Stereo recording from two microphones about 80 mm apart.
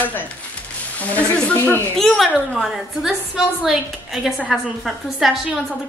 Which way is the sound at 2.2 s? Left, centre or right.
Centre.